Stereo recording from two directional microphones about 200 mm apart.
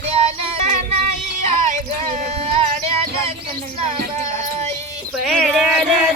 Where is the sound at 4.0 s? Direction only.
35° right (ahead or behind).